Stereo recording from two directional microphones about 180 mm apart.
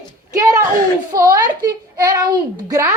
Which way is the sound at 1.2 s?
20° right (ahead or behind).